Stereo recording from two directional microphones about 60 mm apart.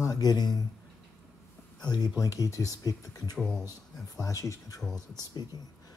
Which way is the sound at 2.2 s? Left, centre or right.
Left.